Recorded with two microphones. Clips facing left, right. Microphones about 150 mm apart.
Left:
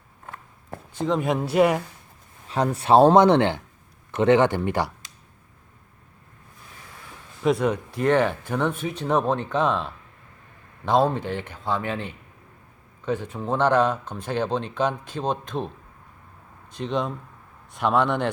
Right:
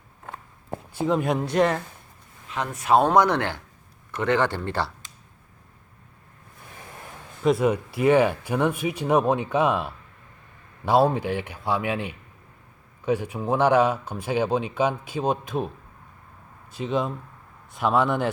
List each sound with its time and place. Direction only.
0.9 s speech: 5° right (ahead or behind)
2.5 s speech: 35° left (ahead or behind); by 4.9 s 15° left (ahead or behind)
7.4 s speech: 5° right (ahead or behind)
16.7 s speech: 5° right (ahead or behind)